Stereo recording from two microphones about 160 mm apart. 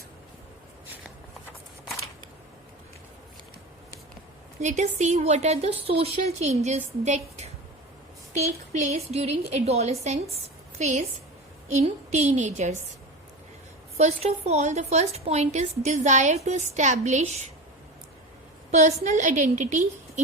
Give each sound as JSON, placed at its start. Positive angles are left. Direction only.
{"t": 4.6, "sound": "a woman's voice", "side_deg": -45}
{"t": 13.9, "sound": "a woman's voice", "side_deg": -40}
{"t": 18.7, "sound": "a woman's voice", "side_deg": -45}